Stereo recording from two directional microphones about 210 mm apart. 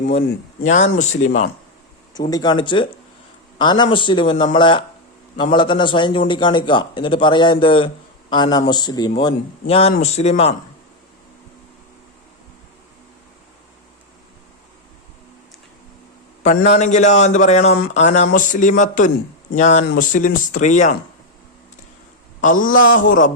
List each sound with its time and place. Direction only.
1.2 s speech: 35° left (ahead or behind)
2.3 s a man's voice: 20° left (ahead or behind)
16.4 s speech: 35° left (ahead or behind)
22.4 s speech: 40° left (ahead or behind)